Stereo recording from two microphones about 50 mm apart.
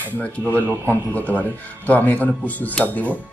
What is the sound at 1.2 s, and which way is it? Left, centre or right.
A man's voice, left.